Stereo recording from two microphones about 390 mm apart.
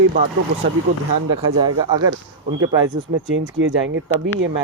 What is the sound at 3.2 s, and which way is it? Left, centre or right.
Speech, right.